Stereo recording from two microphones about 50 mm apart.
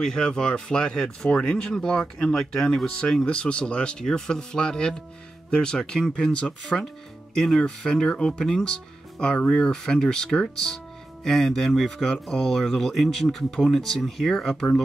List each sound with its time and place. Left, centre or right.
0.0 s speech: centre